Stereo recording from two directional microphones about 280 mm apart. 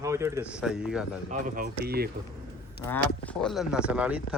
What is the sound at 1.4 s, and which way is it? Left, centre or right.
Speech, right.